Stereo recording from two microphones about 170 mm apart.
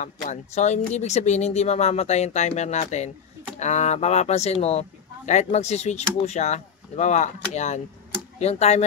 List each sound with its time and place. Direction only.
0.0 s speech: 45° left (ahead or behind)